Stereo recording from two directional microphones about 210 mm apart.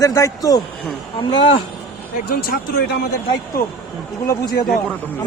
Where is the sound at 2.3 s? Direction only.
45° left (ahead or behind).